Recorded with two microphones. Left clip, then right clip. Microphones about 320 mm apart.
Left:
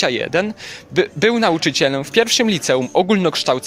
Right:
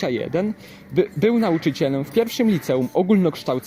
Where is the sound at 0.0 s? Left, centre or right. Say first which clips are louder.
Left 5 dB; left.